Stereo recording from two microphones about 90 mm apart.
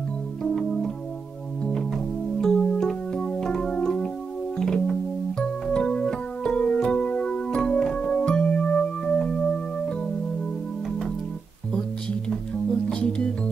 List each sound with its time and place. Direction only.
0.4 s organ: 5° left (ahead or behind)
1.6 s music: 5° left (ahead or behind)
2.4 s keyboard: 10° left (ahead or behind)
4.6 s music: 5° left (ahead or behind)
5.4 s keyboard: 10° left (ahead or behind)
12.9 s music: 10° left (ahead or behind)